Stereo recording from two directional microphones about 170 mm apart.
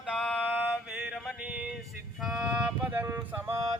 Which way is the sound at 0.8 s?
5° right (ahead or behind).